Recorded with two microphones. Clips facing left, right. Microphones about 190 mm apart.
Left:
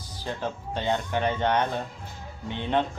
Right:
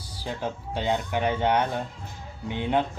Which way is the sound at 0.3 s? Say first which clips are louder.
Even; 10° right (ahead or behind).